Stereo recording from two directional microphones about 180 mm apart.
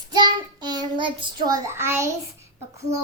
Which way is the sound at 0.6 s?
25° right (ahead or behind).